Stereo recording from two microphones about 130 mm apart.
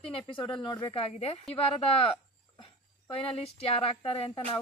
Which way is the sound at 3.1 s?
50° left (ahead or behind).